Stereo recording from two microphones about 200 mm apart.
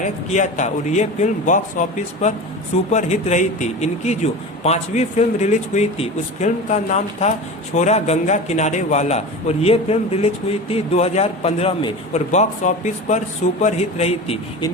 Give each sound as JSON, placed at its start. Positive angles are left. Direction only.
{"t": 0.0, "sound": "speech", "side_deg": 40}